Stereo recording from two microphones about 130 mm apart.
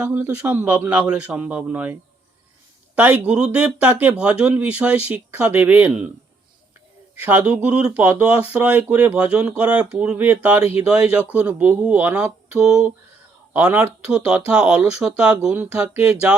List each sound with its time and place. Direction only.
0.0 s a man's voice: 10° right (ahead or behind)
7.2 s a man's voice: 15° right (ahead or behind)
10.6 s speech: 50° left (ahead or behind)
11.1 s a man's voice: 10° right (ahead or behind)